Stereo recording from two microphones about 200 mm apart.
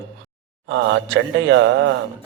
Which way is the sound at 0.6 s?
70° right (ahead or behind).